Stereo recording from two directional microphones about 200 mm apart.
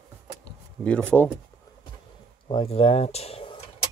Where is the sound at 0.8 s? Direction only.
5° left (ahead or behind).